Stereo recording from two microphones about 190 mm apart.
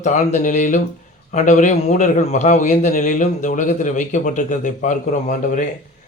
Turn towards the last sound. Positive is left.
turn(degrees=40)  # may be behind; listen again after turning